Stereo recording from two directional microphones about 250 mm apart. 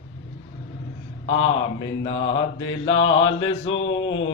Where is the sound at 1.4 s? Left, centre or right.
Centre.